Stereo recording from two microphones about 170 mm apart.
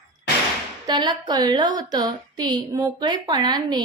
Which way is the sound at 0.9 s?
25° right (ahead or behind).